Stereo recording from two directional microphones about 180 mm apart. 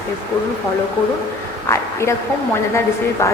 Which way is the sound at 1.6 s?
15° left (ahead or behind).